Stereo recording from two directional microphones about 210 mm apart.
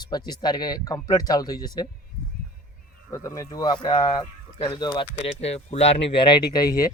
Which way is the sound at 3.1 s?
15° left (ahead or behind).